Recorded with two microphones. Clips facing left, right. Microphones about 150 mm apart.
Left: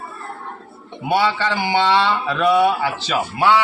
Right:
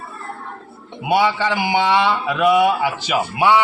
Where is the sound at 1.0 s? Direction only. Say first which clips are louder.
Right 1 dB; 15° right (ahead or behind).